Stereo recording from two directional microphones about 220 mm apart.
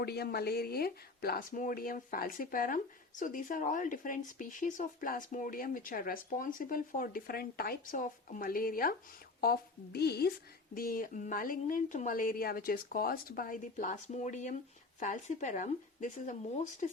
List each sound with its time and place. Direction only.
0.0 s a woman's voice: 45° left (ahead or behind)